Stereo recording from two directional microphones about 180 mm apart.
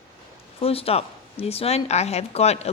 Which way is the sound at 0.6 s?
35° left (ahead or behind).